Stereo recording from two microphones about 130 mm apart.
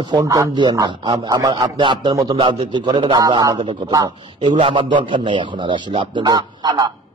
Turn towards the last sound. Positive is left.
turn(degrees=-30)  # may be behind; listen again after turning